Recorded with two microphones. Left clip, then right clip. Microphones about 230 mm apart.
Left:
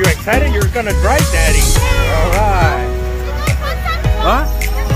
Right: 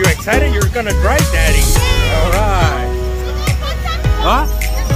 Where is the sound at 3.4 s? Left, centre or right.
Centre.